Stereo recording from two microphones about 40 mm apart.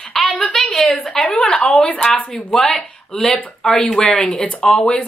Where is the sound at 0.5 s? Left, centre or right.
Left.